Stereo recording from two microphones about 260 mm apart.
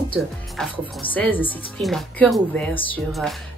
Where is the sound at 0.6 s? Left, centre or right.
Centre.